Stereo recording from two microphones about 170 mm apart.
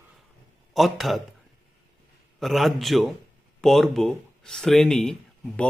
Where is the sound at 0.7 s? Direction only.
Centre (ahead or behind).